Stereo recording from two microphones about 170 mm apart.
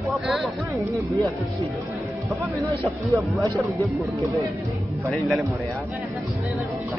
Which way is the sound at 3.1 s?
20° right (ahead or behind).